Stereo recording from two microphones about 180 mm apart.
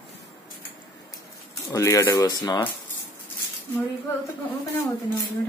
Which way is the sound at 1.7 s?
15° left (ahead or behind).